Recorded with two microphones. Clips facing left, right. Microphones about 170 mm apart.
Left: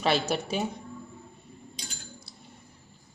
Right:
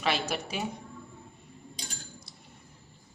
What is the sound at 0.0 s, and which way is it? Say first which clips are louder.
Speech: left 4 dB; 30° left (ahead or behind).